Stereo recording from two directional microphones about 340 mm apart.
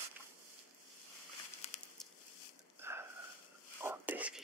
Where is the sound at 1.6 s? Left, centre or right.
Centre.